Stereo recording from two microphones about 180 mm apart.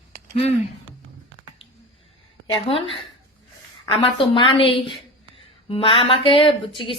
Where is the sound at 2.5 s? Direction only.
30° left (ahead or behind).